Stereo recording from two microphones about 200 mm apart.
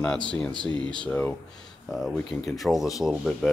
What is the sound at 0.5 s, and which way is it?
Speech, 25° right (ahead or behind).